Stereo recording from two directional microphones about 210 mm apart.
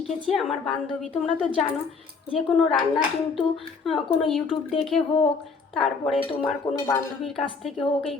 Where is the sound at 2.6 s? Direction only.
5° left (ahead or behind).